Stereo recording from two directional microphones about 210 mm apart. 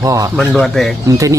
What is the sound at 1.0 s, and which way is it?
Speech, 15° right (ahead or behind).